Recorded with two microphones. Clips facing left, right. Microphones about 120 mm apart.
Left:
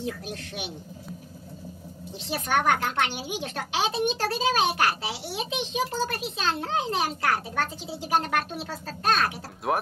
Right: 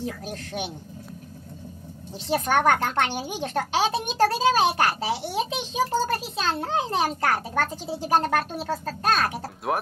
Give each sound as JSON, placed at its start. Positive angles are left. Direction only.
{"t": 0.0, "sound": "speech", "side_deg": -40}
{"t": 2.2, "sound": "speech", "side_deg": -40}
{"t": 9.7, "sound": "speech", "side_deg": 0}